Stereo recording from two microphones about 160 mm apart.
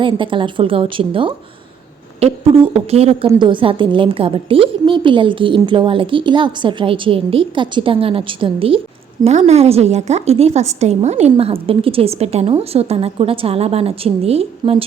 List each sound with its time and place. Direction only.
0.0 s a woman's voice: 30° right (ahead or behind)